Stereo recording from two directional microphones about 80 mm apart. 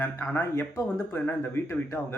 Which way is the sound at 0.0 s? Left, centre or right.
Left.